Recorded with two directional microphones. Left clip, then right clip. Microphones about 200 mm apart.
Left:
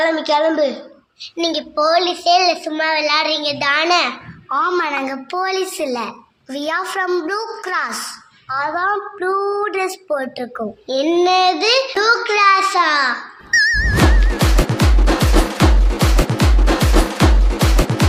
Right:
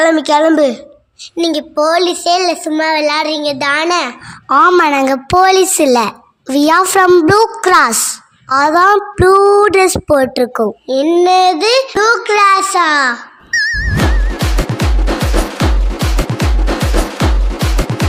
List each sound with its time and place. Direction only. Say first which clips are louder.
0.0 s a woman's voice: right 6 dB; 60° right (ahead or behind)
1.4 s a child's voice: right 4 dB; 50° right (ahead or behind)
4.4 s a woman's voice: right 10 dB; 55° right (ahead or behind)
10.8 s a child's voice: right 4 dB; 40° right (ahead or behind)
13.5 s music: even; centre (ahead or behind)